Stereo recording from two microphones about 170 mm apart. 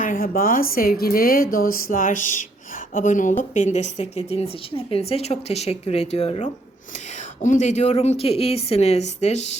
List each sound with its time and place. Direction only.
0.0 s a woman's voice: 55° left (ahead or behind); by 6.5 s 35° left (ahead or behind)
7.4 s speech: 45° left (ahead or behind)